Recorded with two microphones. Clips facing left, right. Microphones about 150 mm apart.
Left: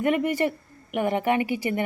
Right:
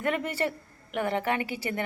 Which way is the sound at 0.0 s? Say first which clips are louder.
Left 6 dB; 15° left (ahead or behind).